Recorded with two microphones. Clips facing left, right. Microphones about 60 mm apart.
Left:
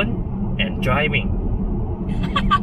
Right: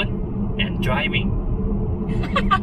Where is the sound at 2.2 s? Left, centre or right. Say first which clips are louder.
Left 1 dB; centre.